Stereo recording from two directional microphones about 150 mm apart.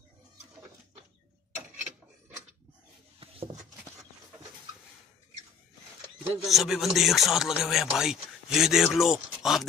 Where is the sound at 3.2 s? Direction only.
40° right (ahead or behind).